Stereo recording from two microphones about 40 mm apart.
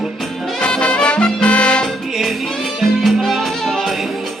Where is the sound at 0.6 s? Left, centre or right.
Left.